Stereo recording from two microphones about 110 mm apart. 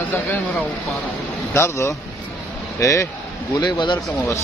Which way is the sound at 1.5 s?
25° left (ahead or behind).